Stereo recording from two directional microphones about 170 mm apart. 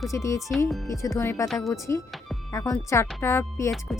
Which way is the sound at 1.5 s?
Centre (ahead or behind).